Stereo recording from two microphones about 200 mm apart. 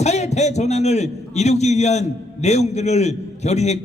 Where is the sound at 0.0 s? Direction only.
35° left (ahead or behind).